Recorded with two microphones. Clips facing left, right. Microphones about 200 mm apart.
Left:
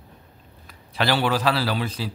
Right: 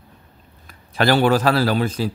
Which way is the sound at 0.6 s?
50° right (ahead or behind).